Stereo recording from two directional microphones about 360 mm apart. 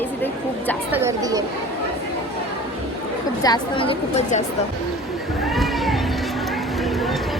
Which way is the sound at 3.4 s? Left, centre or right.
Centre.